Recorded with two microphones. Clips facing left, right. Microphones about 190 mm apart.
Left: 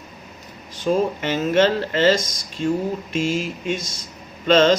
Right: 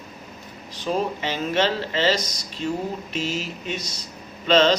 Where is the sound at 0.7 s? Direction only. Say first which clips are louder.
Left 5 dB; 50° left (ahead or behind).